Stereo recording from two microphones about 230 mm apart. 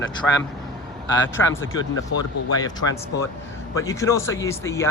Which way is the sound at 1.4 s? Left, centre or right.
Centre.